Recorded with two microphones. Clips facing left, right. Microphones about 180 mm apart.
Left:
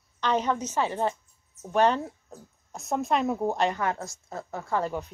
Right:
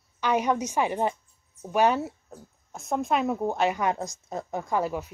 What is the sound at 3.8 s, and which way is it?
Speech, 15° right (ahead or behind).